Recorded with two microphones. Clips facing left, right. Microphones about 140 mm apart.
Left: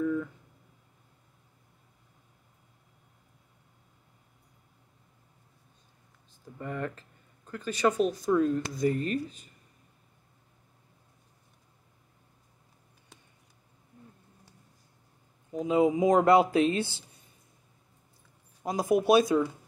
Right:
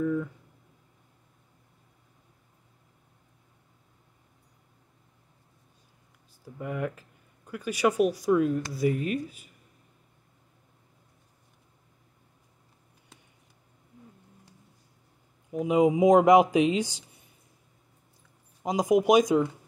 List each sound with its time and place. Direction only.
0.0 s a sound: 5° right (ahead or behind)
6.4 s a man's voice: 10° right (ahead or behind)
15.6 s a man's voice: 15° right (ahead or behind)
18.6 s a man's voice: 15° right (ahead or behind)